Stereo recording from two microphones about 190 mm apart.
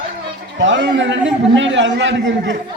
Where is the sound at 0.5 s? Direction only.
70° right (ahead or behind).